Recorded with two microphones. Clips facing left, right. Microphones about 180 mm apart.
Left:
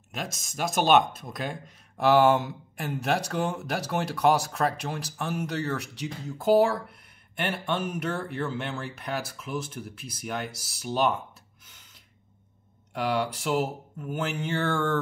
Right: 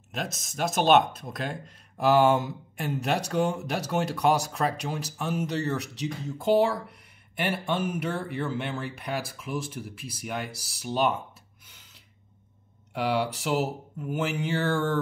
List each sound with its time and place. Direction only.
0.2 s speech: centre (ahead or behind)
12.9 s speech: 5° right (ahead or behind)